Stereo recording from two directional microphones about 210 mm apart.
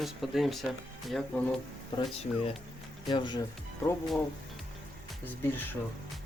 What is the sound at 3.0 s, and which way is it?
Speech, 20° left (ahead or behind).